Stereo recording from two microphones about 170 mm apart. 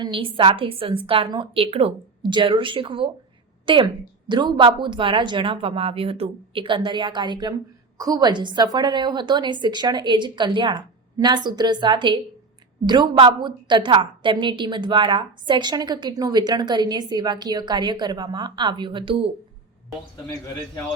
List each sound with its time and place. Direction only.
0.0 s a woman's voice: 30° right (ahead or behind)